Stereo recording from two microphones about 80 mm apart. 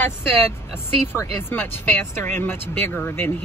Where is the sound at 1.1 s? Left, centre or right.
Left.